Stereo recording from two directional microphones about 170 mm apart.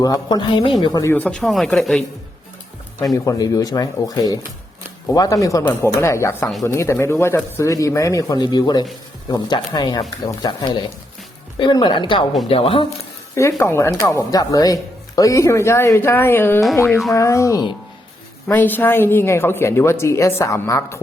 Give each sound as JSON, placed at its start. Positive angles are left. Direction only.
{"t": 0.0, "sound": "speech", "side_deg": 25}
{"t": 1.1, "sound": "speech", "side_deg": 5}
{"t": 3.2, "sound": "speech", "side_deg": 20}
{"t": 13.3, "sound": "speech", "side_deg": 15}